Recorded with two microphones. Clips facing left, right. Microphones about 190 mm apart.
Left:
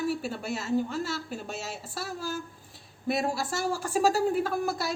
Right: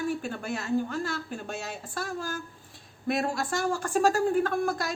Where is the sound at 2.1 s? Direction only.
50° right (ahead or behind).